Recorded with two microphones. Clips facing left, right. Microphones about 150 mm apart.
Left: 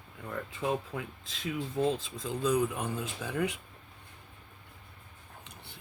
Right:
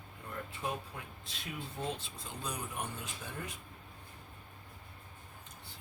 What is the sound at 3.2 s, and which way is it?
Speech, 85° left.